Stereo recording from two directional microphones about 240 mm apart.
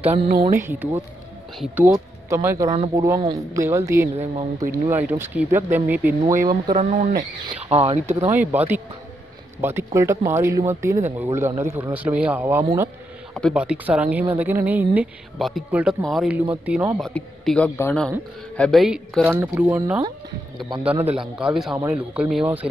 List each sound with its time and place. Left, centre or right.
0.0 s speech: right
0.5 s speech: centre
6.7 s speech: right
8.4 s speech: centre
17.0 s speech: centre